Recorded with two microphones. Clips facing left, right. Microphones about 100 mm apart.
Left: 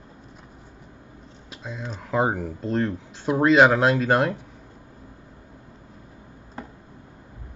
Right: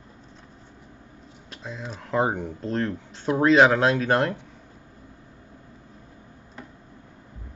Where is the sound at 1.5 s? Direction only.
Centre (ahead or behind).